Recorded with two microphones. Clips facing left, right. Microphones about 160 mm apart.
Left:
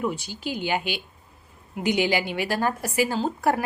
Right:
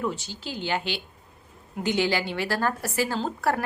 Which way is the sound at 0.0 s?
15° left (ahead or behind).